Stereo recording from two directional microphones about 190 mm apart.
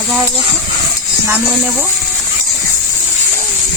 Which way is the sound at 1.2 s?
10° right (ahead or behind).